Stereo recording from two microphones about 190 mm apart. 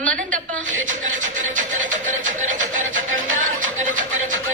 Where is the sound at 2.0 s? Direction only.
40° right (ahead or behind).